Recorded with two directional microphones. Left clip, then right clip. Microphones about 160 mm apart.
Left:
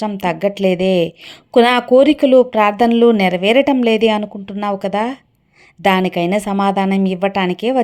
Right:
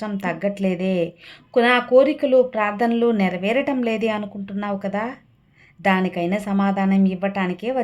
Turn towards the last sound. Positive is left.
turn(degrees=30)  # may be behind; listen again after turning